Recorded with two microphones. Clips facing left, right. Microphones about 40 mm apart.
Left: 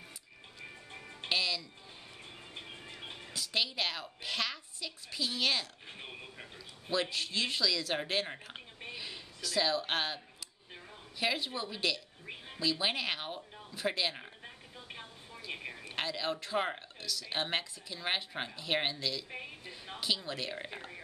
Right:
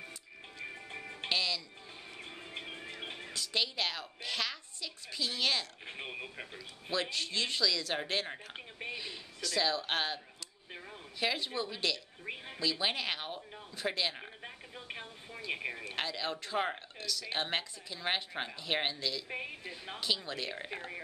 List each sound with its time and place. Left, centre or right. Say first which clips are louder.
0.6 s music: right 5 dB; centre
1.3 s speech: left 1 dB; centre
2.5 s music: right 4 dB; right
3.3 s speech: left 1 dB; centre
5.9 s speech: right 4 dB; right
6.9 s speech: left 1 dB; centre
14.4 s a sound: right 3 dB; right
15.4 s speech: right 5 dB; centre
15.8 s speech: even; centre
19.2 s speech: right 4 dB; right
20.0 s speech: left 1 dB; centre